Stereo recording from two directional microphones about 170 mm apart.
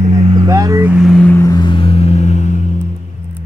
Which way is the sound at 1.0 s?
5° left (ahead or behind).